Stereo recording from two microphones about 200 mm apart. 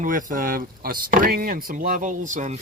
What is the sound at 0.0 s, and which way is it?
Speech, 40° right (ahead or behind).